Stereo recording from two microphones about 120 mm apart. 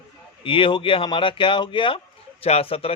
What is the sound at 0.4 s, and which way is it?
Speech, 45° left (ahead or behind).